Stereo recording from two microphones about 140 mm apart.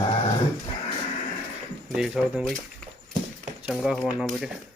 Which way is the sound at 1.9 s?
5° right (ahead or behind).